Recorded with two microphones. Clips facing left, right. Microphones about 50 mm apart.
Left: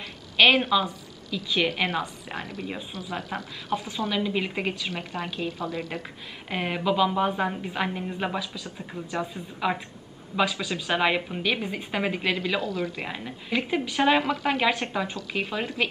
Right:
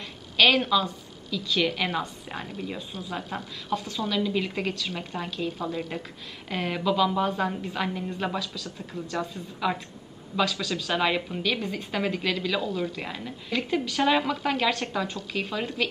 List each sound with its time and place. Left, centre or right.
0.4 s a woman's voice: centre
1.9 s a woman's voice: left
3.7 s a woman's voice: left
5.5 s a woman's voice: left
6.5 s a woman's voice: centre
12.6 s a woman's voice: left
12.9 s a woman's voice: centre